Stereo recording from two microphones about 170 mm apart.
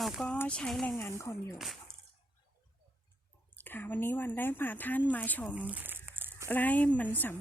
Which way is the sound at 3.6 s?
10° left (ahead or behind).